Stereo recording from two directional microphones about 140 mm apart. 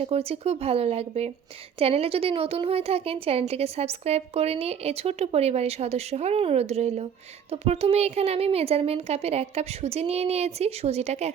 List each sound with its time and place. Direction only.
0.0 s a woman's voice: 45° right (ahead or behind)